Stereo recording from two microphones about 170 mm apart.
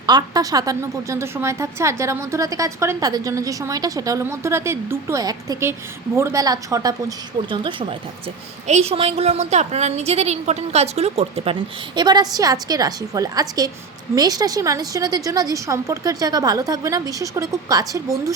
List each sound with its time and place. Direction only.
0.0 s a woman's voice: 25° right (ahead or behind)
8.6 s a woman's voice: 40° right (ahead or behind)
11.9 s a woman's voice: 25° right (ahead or behind)